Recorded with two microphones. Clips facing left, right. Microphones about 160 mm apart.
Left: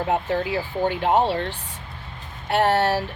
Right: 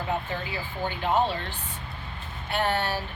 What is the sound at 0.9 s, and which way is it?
Speech, 70° left (ahead or behind).